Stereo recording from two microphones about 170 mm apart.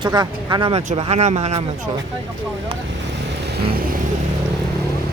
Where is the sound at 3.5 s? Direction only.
65° right (ahead or behind).